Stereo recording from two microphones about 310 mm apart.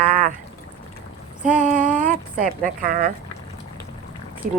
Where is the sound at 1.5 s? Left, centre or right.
Right.